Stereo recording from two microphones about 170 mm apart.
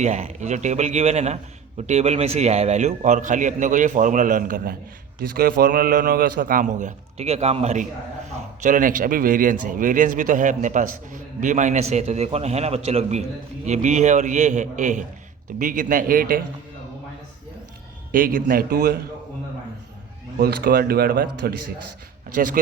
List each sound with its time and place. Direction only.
0.0 s a man's voice: 45° right (ahead or behind)
8.6 s a man's voice: 50° right (ahead or behind)
18.1 s speech: 55° right (ahead or behind)
20.4 s speech: 60° right (ahead or behind)